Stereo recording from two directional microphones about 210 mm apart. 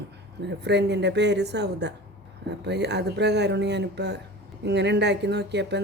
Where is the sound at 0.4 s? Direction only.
55° right (ahead or behind).